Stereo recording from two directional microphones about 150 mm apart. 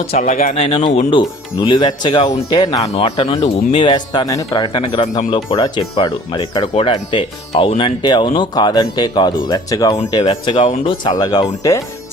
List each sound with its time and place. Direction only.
0.2 s speech: 55° left (ahead or behind)
0.6 s speech: 35° left (ahead or behind)
2.8 s speech: 40° left (ahead or behind)
10.2 s speech: 45° left (ahead or behind)
10.8 s speech: 30° left (ahead or behind)